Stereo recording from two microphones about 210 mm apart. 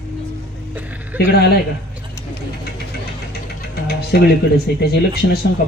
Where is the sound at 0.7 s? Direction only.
10° right (ahead or behind).